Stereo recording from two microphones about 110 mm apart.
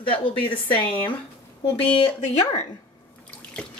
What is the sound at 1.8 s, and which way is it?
Speech, 70° left (ahead or behind).